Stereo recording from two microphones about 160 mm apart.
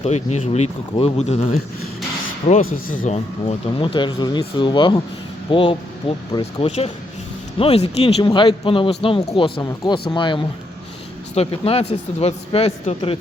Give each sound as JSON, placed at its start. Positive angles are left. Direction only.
{"t": 0.0, "sound": "a man's voice", "side_deg": 40}
{"t": 2.6, "sound": "speech", "side_deg": 55}
{"t": 3.4, "sound": "a man's voice", "side_deg": 35}